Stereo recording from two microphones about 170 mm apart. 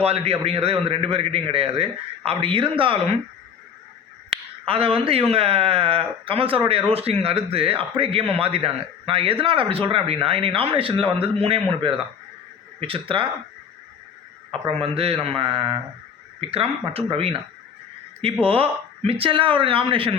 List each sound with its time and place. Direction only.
0.0 s speech: 35° right (ahead or behind)
4.3 s speech: 35° right (ahead or behind)
14.7 s speech: 35° right (ahead or behind)
18.4 s speech: 35° right (ahead or behind)